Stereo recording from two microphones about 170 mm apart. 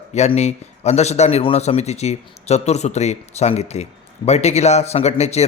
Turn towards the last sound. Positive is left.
turn(degrees=40)  # may be behind; listen again after turning